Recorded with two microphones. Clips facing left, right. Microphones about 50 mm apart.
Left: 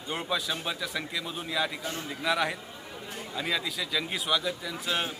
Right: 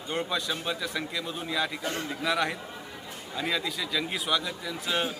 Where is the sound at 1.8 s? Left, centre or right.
Right.